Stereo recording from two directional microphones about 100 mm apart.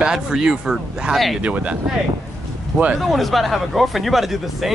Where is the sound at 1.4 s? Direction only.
10° right (ahead or behind).